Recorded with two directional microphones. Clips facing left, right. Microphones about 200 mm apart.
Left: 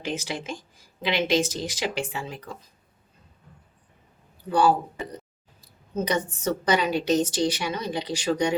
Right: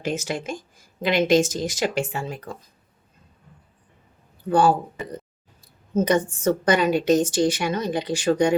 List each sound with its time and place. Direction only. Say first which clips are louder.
0.0 s a woman's voice: right 4 dB; 45° right (ahead or behind)
4.4 s speech: right 3 dB; 50° right (ahead or behind)
6.2 s a woman's voice: right 5 dB; 50° right (ahead or behind)